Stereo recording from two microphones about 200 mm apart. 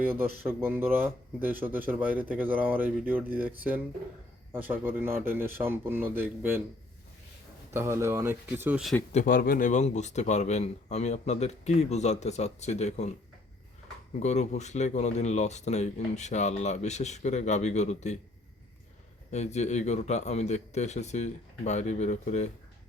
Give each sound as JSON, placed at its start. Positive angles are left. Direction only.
{"t": 0.1, "sound": "speech", "side_deg": -10}
{"t": 4.5, "sound": "speech", "side_deg": -10}
{"t": 7.7, "sound": "speech", "side_deg": -15}
{"t": 9.1, "sound": "speech", "side_deg": 45}
{"t": 14.2, "sound": "speech", "side_deg": 35}
{"t": 19.3, "sound": "speech", "side_deg": 35}